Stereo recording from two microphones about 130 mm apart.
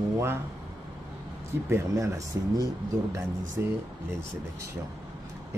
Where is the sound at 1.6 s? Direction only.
20° right (ahead or behind).